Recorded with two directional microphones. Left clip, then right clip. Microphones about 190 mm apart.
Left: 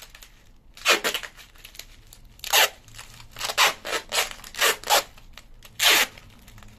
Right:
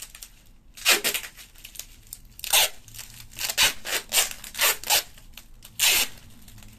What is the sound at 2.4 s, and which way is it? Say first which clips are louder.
Crunch: left 2 dB; 10° right (ahead or behind).